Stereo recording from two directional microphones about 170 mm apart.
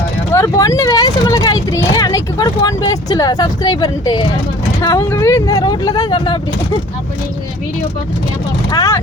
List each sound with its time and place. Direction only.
0.3 s speech: 20° left (ahead or behind)
8.7 s speech: 20° left (ahead or behind)